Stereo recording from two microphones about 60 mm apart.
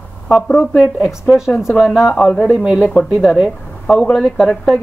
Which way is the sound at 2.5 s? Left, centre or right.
Centre.